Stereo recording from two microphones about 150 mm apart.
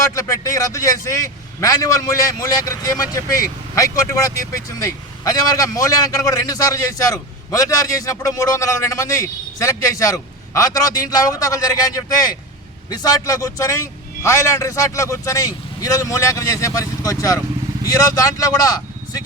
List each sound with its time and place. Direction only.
0.0 s speech: 20° left (ahead or behind)